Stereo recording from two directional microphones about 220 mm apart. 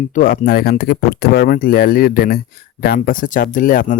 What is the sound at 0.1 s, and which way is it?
Speech, 40° left (ahead or behind).